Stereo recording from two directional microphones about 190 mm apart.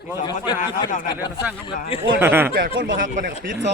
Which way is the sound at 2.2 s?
10° right (ahead or behind).